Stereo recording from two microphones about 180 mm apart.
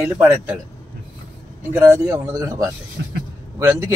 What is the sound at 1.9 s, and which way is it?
A man's voice, 15° right (ahead or behind).